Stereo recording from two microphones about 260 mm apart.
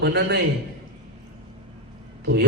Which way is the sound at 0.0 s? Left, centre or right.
Right.